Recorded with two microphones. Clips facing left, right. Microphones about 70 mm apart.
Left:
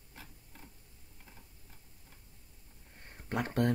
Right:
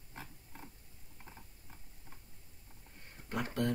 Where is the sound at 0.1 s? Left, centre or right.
Right.